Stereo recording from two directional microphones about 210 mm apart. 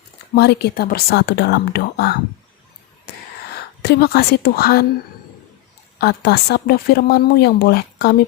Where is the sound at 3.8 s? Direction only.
50° left (ahead or behind).